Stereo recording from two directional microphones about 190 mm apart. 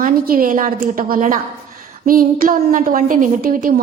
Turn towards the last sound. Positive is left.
turn(degrees=-45)  # may be behind; listen again after turning